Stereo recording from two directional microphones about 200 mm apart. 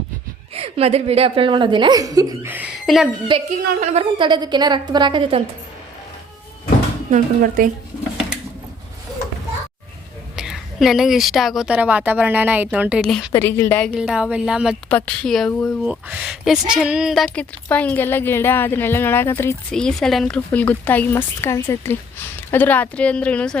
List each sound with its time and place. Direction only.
0.5 s a woman's voice: 30° right (ahead or behind); by 3.1 s centre (ahead or behind)
3.3 s a woman's voice: 25° right (ahead or behind)
7.1 s speech: 45° right (ahead or behind)
10.3 s a woman's voice: centre (ahead or behind)
13.3 s a woman's voice: 10° left (ahead or behind)